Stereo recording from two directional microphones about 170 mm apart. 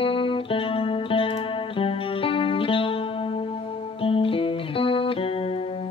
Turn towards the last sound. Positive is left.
turn(degrees=35)  # may be behind; listen again after turning